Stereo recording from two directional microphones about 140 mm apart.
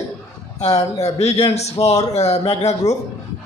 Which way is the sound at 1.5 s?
50° left (ahead or behind).